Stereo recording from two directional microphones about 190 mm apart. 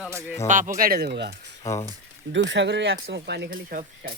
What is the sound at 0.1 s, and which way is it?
Speech, 15° right (ahead or behind).